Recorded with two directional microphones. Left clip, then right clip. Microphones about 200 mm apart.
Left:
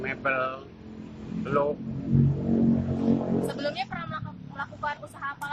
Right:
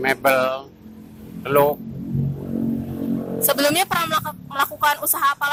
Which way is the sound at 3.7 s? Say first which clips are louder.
Right 14 dB; 50° right (ahead or behind).